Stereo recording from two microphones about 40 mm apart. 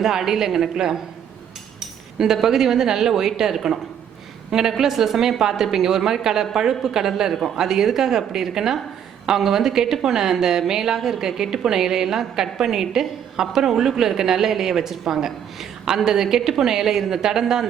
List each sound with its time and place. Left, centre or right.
0.0 s a woman's voice: centre
2.1 s a woman's voice: centre
4.8 s a woman's voice: centre